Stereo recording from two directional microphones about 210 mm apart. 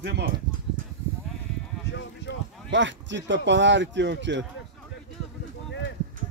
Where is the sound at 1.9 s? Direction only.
55° left (ahead or behind).